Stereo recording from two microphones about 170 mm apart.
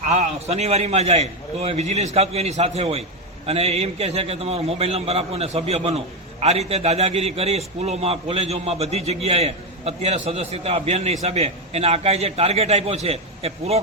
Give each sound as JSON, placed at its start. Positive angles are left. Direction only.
{"t": 0.1, "sound": "a man's voice", "side_deg": -40}